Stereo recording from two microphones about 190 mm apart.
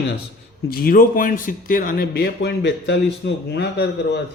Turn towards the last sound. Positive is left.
turn(degrees=65)  # may be behind; listen again after turning